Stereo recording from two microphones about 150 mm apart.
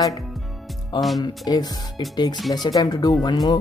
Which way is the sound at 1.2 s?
25° left (ahead or behind).